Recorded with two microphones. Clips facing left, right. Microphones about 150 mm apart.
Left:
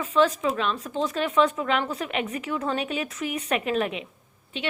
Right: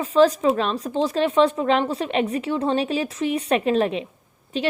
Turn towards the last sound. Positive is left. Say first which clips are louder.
# right 7 dB
turn(degrees=-40)  # may be behind; listen again after turning